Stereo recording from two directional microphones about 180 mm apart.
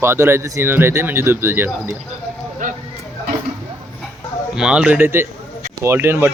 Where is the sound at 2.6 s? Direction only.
45° right (ahead or behind).